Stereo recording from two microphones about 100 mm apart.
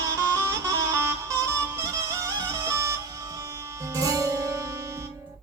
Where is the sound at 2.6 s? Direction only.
30° right (ahead or behind).